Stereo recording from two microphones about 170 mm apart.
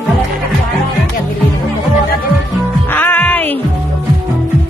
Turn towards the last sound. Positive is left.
turn(degrees=10)  # may be behind; listen again after turning